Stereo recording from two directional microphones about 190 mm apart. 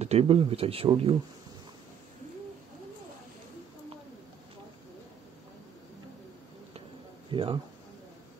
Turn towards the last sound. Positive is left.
turn(degrees=-25)  # may be behind; listen again after turning